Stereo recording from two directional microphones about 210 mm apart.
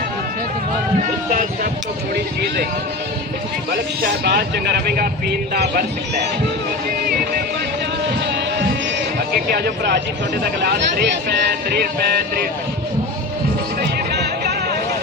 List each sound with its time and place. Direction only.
4.2 s speech: 50° right (ahead or behind)
9.5 s speech: 50° right (ahead or behind)
13.8 s a sound: 50° right (ahead or behind)